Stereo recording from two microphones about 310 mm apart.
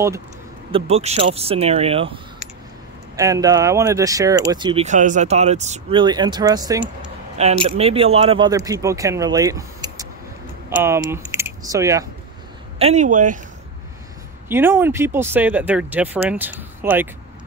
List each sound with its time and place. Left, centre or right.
0.7 s speech: centre
3.2 s speech: centre
14.5 s speech: centre